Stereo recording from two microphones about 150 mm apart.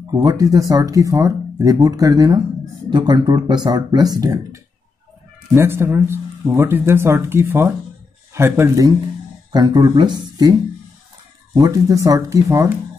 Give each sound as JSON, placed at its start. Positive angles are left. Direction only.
{"t": 0.0, "sound": "speech", "side_deg": -25}
{"t": 11.5, "sound": "speech", "side_deg": -25}